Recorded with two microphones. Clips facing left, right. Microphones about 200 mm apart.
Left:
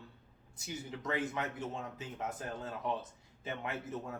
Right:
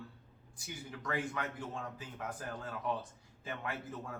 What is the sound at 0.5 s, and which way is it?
Speech, 25° left (ahead or behind).